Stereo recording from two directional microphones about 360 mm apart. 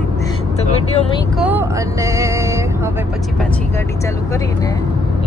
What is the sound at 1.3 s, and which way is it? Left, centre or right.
Speech, centre.